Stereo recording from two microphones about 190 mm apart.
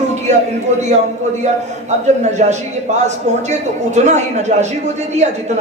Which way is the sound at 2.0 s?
35° right (ahead or behind).